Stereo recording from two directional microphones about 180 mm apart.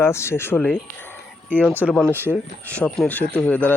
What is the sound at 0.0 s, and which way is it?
Speech, 15° left (ahead or behind).